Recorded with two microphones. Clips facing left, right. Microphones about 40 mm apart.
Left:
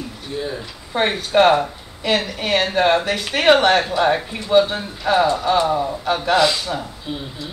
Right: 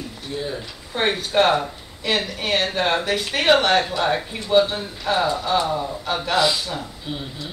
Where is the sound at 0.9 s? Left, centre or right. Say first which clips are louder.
Left 3 dB; centre.